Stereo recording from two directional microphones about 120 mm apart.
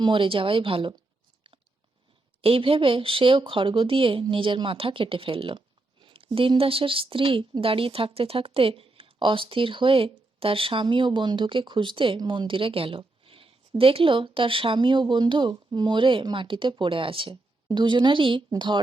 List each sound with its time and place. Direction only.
0.0 s speech: 45° right (ahead or behind)
1.5 s chewing: 45° right (ahead or behind)
2.4 s speech: 50° right (ahead or behind)